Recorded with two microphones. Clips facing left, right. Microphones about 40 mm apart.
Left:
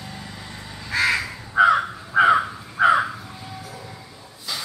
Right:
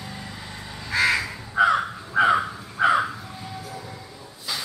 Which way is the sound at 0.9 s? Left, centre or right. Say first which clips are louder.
Even; centre.